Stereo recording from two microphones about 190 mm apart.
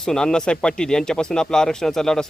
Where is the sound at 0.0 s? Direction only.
5° left (ahead or behind).